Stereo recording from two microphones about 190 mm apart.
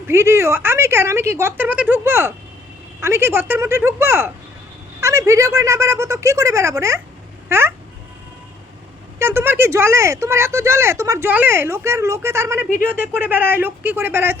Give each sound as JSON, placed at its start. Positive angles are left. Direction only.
{"t": 0.1, "sound": "speech", "side_deg": -15}
{"t": 9.1, "sound": "speech", "side_deg": -15}